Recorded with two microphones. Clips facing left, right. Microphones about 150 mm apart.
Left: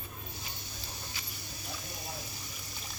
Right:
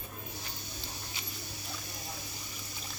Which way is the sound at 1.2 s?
20° right (ahead or behind).